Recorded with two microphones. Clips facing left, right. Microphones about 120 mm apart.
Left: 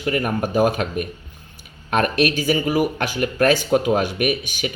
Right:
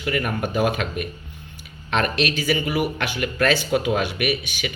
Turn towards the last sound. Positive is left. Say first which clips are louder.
# left 3 dB
turn(degrees=45)  # may be behind; listen again after turning